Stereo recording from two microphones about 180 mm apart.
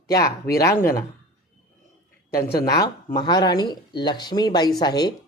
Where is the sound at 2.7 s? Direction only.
20° left (ahead or behind).